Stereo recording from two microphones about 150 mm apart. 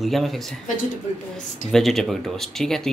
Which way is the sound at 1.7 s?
Centre (ahead or behind).